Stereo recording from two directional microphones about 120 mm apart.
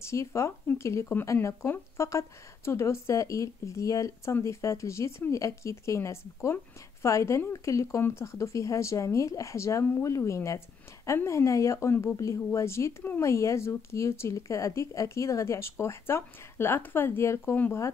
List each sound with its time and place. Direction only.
0.0 s speech: 25° left (ahead or behind)